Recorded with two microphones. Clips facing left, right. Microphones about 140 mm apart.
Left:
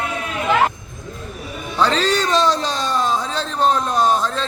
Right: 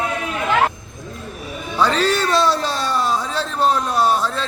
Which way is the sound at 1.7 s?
10° right (ahead or behind).